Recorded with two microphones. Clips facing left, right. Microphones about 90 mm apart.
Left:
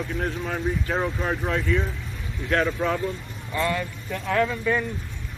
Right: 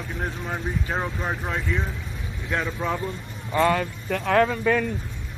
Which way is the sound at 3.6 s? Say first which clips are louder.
Right 5 dB; 85° right.